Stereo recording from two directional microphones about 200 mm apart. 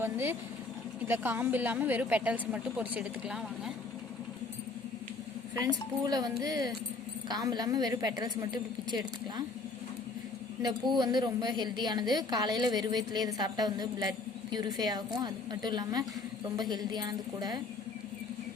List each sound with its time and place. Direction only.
0.0 s a woman's voice: 10° right (ahead or behind)
6.1 s a woman's voice: 20° right (ahead or behind)
10.6 s a woman's voice: 20° right (ahead or behind)